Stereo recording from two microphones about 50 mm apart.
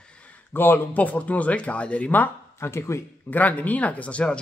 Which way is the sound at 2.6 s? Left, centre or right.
Left.